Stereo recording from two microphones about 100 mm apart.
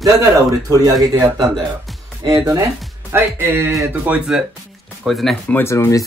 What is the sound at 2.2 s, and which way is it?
Speech, 40° right (ahead or behind).